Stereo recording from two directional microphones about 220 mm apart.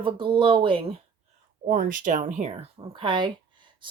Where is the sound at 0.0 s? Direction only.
20° right (ahead or behind).